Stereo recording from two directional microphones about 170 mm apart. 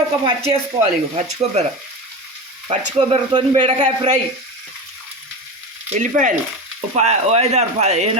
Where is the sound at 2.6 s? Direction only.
35° right (ahead or behind).